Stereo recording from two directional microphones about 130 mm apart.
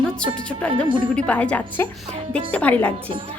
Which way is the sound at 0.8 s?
40° right (ahead or behind).